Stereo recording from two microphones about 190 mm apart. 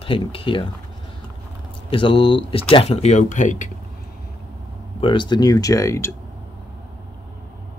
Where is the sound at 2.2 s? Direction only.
70° left (ahead or behind).